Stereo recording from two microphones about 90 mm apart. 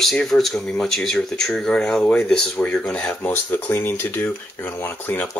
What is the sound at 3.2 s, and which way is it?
Speech, 25° left (ahead or behind).